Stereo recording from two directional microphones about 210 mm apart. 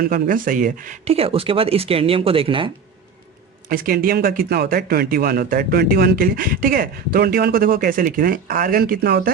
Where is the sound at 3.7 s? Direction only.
45° right (ahead or behind).